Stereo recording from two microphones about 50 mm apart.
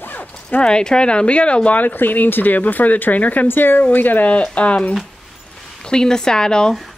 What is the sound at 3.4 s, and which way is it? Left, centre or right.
Speech, left.